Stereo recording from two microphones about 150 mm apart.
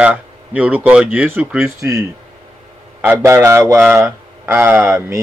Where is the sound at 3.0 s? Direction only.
15° right (ahead or behind).